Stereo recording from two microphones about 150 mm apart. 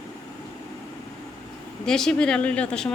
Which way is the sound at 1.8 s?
5° left (ahead or behind).